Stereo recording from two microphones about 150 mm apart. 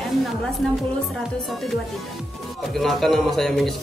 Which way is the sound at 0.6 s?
5° left (ahead or behind).